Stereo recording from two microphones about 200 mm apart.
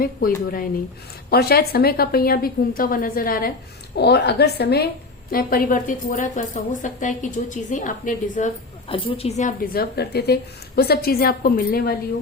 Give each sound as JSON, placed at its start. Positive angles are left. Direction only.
{"t": 0.0, "sound": "a woman's voice", "side_deg": 45}
{"t": 8.9, "sound": "a woman's voice", "side_deg": 30}